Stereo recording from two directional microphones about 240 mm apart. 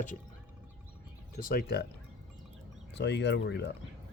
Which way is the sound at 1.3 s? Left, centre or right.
Left.